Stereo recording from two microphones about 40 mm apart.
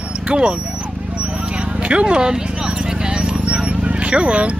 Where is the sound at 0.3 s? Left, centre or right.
Right.